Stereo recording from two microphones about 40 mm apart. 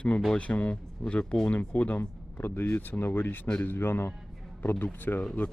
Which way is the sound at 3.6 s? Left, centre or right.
Left.